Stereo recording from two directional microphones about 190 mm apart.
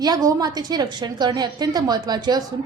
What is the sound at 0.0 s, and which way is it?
A woman's voice, 20° right (ahead or behind).